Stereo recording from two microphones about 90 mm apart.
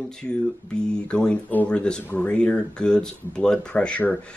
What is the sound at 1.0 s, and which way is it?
Speech, 10° left (ahead or behind).